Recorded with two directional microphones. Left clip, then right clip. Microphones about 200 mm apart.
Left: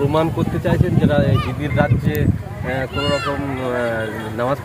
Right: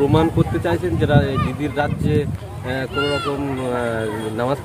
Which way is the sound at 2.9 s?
50° left (ahead or behind).